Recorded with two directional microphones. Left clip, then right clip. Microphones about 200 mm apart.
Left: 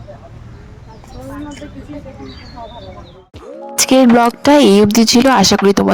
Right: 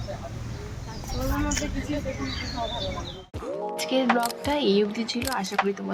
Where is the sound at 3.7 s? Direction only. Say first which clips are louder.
Left 14 dB; 55° left (ahead or behind).